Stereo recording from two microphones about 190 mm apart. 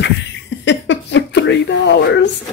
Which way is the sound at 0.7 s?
70° left (ahead or behind).